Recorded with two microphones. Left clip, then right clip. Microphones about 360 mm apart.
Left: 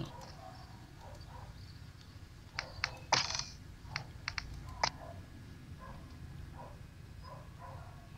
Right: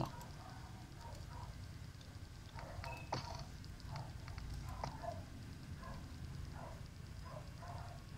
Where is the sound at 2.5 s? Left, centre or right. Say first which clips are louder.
Left 10 dB; left.